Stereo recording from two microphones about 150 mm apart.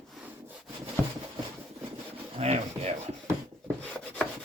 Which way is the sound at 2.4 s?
45° right (ahead or behind).